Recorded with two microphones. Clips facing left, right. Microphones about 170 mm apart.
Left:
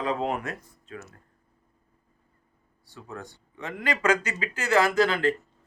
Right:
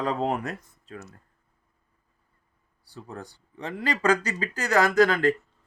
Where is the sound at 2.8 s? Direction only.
35° right (ahead or behind).